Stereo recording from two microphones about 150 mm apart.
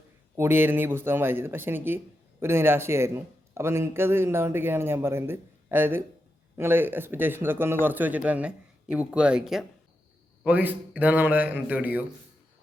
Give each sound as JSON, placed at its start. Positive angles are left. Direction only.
{"t": 0.3, "sound": "a man's voice", "side_deg": -15}